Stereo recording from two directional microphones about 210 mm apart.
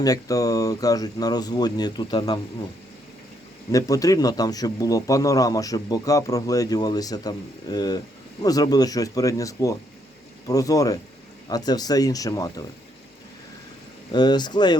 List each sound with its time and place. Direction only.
0.0 s speech: 15° left (ahead or behind)
3.7 s speech: 15° left (ahead or behind)
14.1 s speech: 20° left (ahead or behind)